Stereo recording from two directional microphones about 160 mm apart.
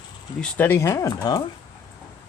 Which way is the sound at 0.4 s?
10° left (ahead or behind).